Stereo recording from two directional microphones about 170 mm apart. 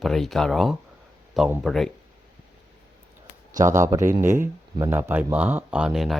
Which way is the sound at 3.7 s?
15° right (ahead or behind).